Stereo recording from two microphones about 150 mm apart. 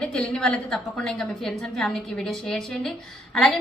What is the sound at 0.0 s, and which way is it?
A woman's voice, 5° left (ahead or behind).